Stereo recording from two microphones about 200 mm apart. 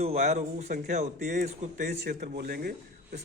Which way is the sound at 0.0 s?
35° right (ahead or behind).